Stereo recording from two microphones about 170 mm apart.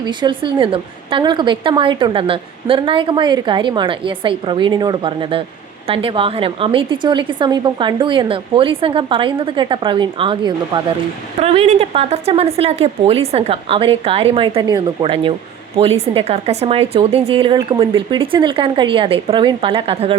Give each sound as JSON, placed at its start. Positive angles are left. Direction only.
{"t": 0.0, "sound": "a woman's voice", "side_deg": -25}